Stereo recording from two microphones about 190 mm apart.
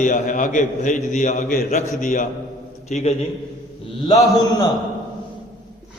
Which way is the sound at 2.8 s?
35° left (ahead or behind).